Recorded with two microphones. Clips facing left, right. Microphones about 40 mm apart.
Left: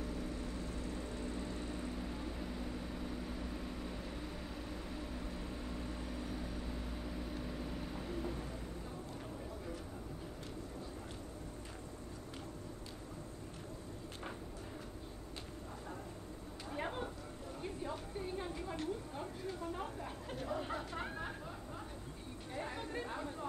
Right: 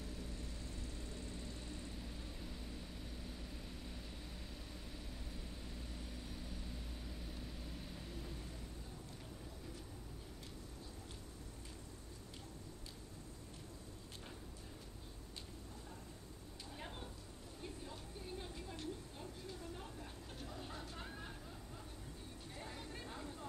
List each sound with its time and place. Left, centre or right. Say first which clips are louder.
0.0 s vehicle: left 8 dB; left
4.9 s vehicle: left 8 dB; left
16.7 s a sound: left 11 dB; left
22.6 s vehicle: left 9 dB; left